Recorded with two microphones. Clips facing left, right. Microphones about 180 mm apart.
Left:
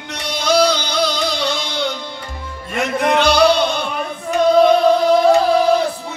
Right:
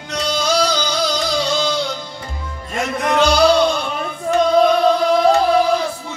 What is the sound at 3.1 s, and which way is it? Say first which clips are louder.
Music: even; 65° left (ahead or behind).